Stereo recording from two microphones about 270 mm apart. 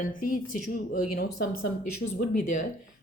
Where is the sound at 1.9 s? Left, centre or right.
Left.